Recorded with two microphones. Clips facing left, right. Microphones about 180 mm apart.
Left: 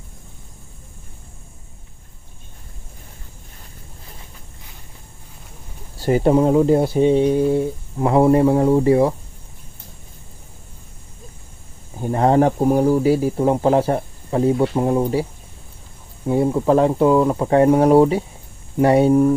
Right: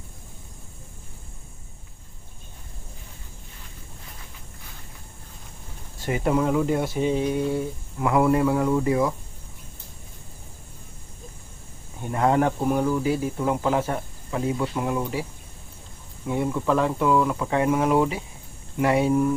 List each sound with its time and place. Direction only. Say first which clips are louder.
6.0 s speech: left 8 dB; 35° left (ahead or behind)
11.9 s speech: left 6 dB; 35° left (ahead or behind)